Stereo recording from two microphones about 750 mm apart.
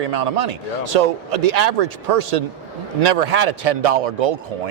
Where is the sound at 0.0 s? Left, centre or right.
Right.